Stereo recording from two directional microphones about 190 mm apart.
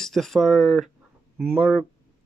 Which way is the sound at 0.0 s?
Centre (ahead or behind).